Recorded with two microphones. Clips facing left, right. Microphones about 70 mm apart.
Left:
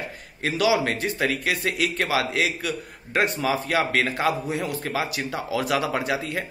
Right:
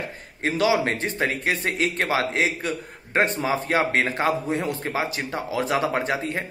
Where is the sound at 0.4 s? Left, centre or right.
Right.